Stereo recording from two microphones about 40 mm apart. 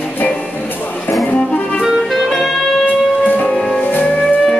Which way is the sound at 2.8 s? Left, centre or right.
Left.